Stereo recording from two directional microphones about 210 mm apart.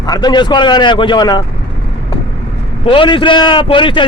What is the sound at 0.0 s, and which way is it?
A man's voice, 20° left (ahead or behind).